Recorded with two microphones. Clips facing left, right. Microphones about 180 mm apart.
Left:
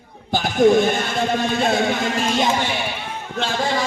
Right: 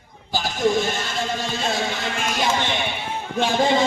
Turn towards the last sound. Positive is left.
turn(degrees=-20)  # may be behind; listen again after turning